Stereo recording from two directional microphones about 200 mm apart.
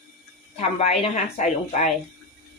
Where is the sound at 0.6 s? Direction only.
30° left (ahead or behind).